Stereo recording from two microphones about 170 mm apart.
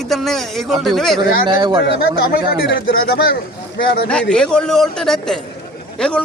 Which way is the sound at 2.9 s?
60° left (ahead or behind).